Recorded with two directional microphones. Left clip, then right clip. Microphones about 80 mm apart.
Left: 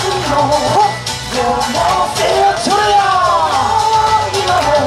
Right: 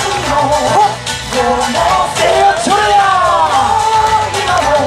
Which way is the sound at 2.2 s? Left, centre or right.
Left.